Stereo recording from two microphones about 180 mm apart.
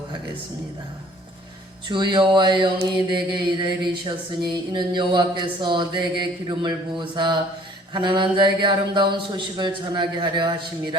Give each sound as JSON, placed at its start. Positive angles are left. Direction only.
{"t": 1.9, "sound": "speech", "side_deg": -25}